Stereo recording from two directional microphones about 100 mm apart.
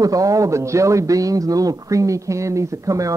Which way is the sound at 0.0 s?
35° right (ahead or behind).